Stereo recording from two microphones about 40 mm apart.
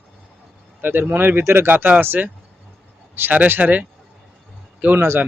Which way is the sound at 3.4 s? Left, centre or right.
Right.